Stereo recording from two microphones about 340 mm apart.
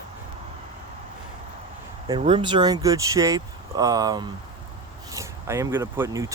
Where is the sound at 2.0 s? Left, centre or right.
Centre.